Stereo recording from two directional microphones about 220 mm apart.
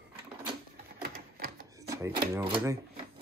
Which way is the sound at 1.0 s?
40° right (ahead or behind).